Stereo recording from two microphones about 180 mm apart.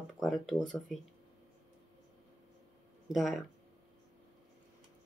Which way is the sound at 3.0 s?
Centre (ahead or behind).